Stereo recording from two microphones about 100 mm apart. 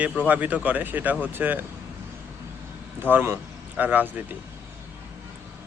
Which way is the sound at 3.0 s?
20° right (ahead or behind).